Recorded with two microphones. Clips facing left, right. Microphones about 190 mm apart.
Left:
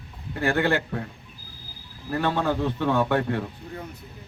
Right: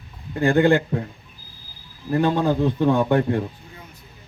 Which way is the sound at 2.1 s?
20° right (ahead or behind).